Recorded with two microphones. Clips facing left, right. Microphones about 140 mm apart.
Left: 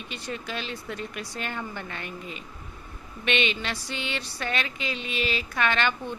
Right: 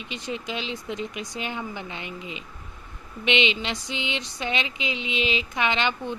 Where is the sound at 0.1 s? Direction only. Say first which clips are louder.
Right 3 dB; 15° right (ahead or behind).